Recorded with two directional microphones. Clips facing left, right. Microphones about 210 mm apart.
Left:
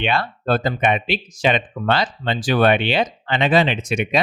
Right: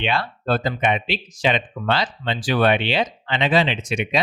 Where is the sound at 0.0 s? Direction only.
55° left (ahead or behind).